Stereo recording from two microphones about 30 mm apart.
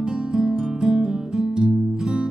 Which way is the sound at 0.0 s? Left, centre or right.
Right.